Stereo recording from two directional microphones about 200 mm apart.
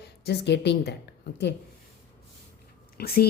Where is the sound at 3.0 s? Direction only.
50° left (ahead or behind).